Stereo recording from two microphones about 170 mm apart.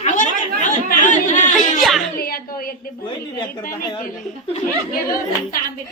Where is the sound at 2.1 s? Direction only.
60° left (ahead or behind).